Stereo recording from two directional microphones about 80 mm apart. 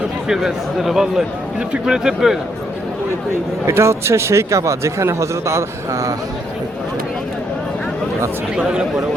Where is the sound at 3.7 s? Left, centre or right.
Right.